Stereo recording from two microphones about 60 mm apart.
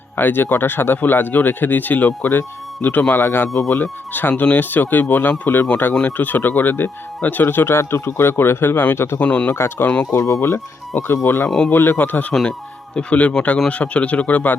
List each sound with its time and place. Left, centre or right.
0.2 s speech: left
5.9 s speech: centre
6.1 s speech: left
9.1 s speech: left
9.5 s speech: left
10.2 s speech: left
11.4 s speech: centre
11.7 s speech: left
13.0 s speech: left